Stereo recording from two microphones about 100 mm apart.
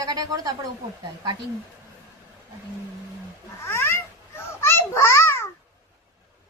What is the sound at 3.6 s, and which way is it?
Babbling, 25° left (ahead or behind).